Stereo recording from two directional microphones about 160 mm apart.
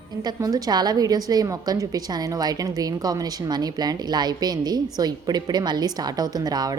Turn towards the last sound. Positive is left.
turn(degrees=-25)  # may be behind; listen again after turning